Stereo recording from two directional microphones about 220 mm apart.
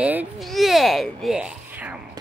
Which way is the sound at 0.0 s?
5° right (ahead or behind).